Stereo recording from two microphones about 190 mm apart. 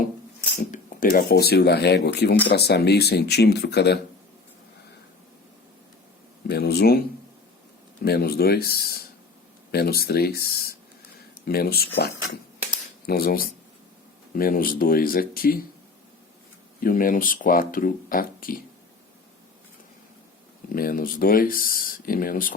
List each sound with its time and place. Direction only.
0.7 s speech: 45° left (ahead or behind)
6.5 s a sound: 55° left (ahead or behind)
8.0 s speech: 55° left (ahead or behind)
16.8 s speech: 45° left (ahead or behind)
20.7 s speech: 50° left (ahead or behind)